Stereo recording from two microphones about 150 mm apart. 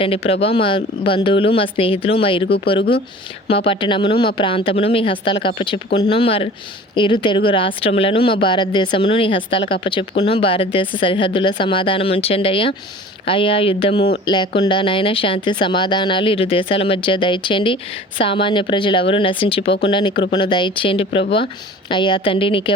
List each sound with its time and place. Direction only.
0.0 s speech: 40° left (ahead or behind)
3.5 s speech: 35° left (ahead or behind)